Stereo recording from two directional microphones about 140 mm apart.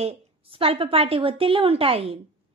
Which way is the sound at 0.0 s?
45° right (ahead or behind).